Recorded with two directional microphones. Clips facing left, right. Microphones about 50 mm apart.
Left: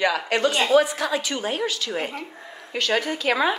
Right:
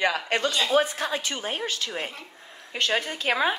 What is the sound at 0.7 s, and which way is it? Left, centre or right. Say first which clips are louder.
A woman's voice: left 4 dB; right.